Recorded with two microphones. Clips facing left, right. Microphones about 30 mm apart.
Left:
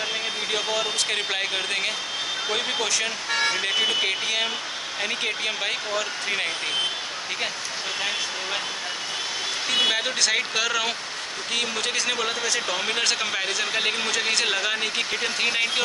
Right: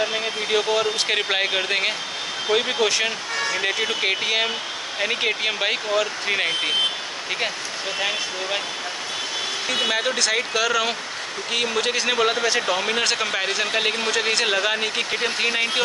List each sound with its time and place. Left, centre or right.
0.0 s a man's voice: centre
9.7 s a man's voice: centre